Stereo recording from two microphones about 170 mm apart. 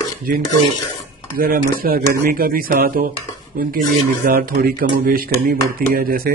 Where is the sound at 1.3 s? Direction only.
55° right (ahead or behind).